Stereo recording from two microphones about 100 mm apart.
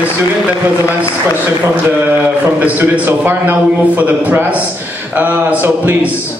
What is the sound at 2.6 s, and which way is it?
A man's voice, 15° right (ahead or behind).